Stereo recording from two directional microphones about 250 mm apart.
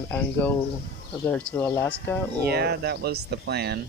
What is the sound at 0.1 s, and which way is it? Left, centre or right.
Speech, centre.